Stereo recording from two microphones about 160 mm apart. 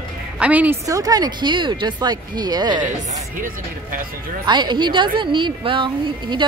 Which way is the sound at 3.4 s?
60° right (ahead or behind).